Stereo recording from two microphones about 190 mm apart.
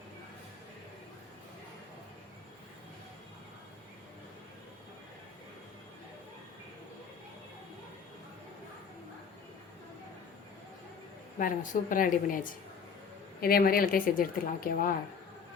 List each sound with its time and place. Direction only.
11.3 s a woman's voice: 45° left (ahead or behind)